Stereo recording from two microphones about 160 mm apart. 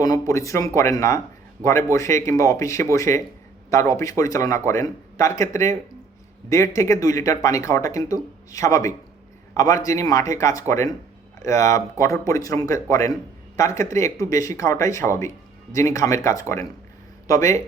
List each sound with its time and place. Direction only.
0.0 s speech: 20° left (ahead or behind)